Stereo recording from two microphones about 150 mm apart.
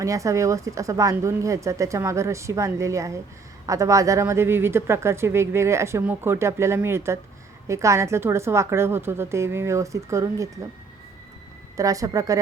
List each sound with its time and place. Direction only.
0.0 s speech: 20° right (ahead or behind)
11.8 s speech: 20° right (ahead or behind)